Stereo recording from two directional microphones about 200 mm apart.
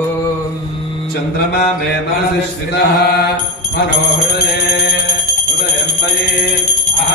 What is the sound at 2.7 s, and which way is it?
Chant, 55° left (ahead or behind).